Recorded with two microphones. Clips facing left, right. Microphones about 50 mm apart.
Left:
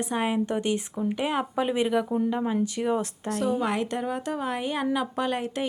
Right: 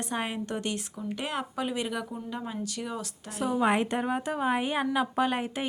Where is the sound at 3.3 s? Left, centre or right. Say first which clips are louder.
Left 4 dB; centre.